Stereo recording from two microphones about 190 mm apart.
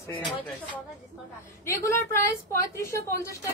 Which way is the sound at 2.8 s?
15° left (ahead or behind).